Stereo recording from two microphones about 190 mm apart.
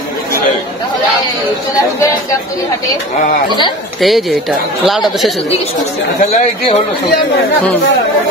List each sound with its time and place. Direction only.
4.0 s speech: centre (ahead or behind)
6.2 s speech: 35° left (ahead or behind)